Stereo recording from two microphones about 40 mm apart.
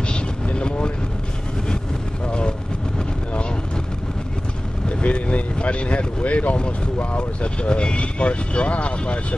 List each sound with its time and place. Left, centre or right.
0.1 s vehicle: left
2.2 s vehicle: left
4.8 s vehicle: left
7.2 s speech: left